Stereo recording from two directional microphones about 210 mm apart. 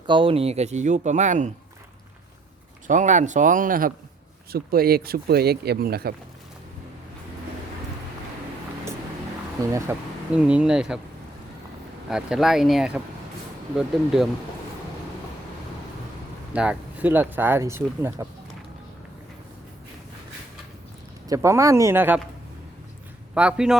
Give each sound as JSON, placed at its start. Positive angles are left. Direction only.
{"t": 0.1, "sound": "speech", "side_deg": -25}
{"t": 2.8, "sound": "speech", "side_deg": -35}
{"t": 9.9, "sound": "speech", "side_deg": -10}
{"t": 12.0, "sound": "speech", "side_deg": 0}
{"t": 16.5, "sound": "speech", "side_deg": -5}
{"t": 21.2, "sound": "speech", "side_deg": -15}
{"t": 23.3, "sound": "speech", "side_deg": -5}